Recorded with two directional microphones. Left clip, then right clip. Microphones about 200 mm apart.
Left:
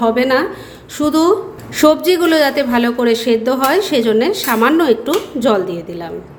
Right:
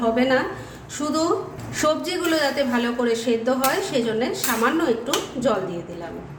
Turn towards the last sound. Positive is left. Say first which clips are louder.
# left 7 dB
turn(degrees=45)  # may be behind; listen again after turning